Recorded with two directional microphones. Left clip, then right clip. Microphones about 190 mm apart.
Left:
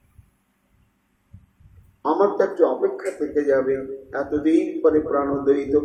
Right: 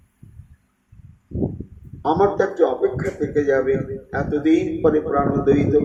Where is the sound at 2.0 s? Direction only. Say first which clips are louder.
Right 1 dB; 30° right (ahead or behind).